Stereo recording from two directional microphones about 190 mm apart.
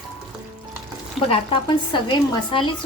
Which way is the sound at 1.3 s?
25° left (ahead or behind).